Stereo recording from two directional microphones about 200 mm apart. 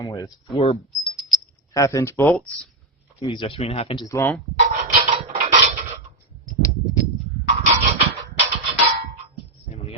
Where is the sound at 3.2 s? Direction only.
25° left (ahead or behind).